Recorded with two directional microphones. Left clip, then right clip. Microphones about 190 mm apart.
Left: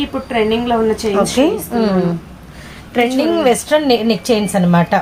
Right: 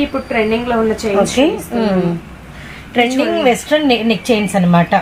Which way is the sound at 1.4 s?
5° left (ahead or behind).